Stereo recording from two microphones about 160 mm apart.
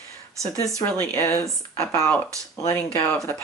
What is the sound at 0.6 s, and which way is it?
Speech, 10° left (ahead or behind).